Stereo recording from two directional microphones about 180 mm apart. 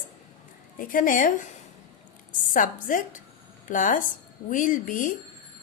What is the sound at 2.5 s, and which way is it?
A woman's voice, 45° left (ahead or behind).